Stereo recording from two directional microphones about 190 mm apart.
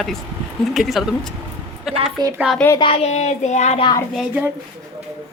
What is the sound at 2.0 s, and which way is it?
Speech, 20° right (ahead or behind).